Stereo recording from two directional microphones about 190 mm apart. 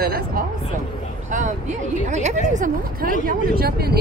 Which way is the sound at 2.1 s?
40° right (ahead or behind).